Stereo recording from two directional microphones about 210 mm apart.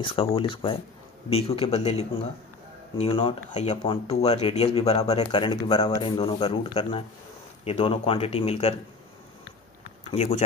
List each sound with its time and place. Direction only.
0.0 s speech: 25° left (ahead or behind)
10.1 s speech: 30° left (ahead or behind)